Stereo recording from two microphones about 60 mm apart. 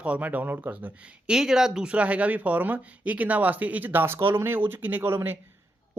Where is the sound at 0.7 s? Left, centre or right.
Centre.